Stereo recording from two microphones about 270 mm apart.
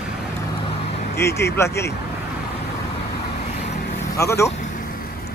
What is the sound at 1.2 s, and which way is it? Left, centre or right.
Speech, centre.